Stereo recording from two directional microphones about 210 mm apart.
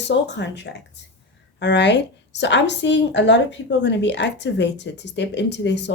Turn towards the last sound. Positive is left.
turn(degrees=55)  # may be behind; listen again after turning